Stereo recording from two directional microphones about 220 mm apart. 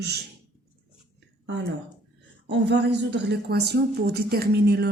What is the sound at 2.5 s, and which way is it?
A man's voice, 50° right (ahead or behind).